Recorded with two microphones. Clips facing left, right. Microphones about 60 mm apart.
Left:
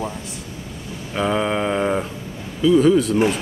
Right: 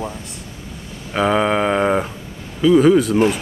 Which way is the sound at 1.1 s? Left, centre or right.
Right.